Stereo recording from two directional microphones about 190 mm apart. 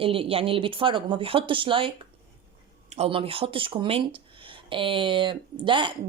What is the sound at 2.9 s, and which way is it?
Speech, 30° right (ahead or behind).